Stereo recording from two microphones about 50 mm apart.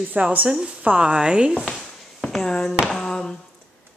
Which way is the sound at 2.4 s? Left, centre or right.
Centre.